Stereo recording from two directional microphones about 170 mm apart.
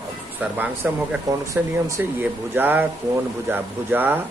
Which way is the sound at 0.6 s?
10° right (ahead or behind).